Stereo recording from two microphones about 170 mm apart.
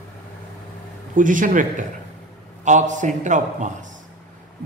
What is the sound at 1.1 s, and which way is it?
A man's voice, 50° right (ahead or behind).